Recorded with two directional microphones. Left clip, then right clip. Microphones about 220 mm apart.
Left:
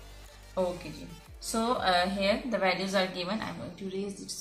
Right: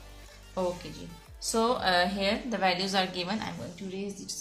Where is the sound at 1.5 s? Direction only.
45° right (ahead or behind).